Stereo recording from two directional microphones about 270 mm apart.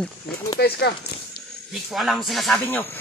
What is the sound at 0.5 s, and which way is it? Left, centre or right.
Speech, left.